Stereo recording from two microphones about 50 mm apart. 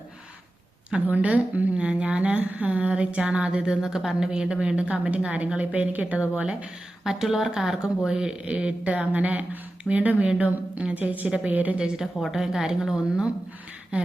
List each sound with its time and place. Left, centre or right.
1.0 s a woman's voice: right
7.0 s speech: centre
8.4 s a woman's voice: right
12.3 s a woman's voice: centre